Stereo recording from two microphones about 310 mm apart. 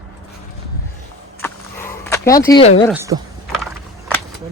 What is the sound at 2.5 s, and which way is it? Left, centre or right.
Speech, centre.